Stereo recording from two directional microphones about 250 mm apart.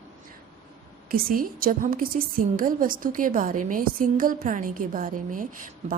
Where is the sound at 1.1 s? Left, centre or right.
Right.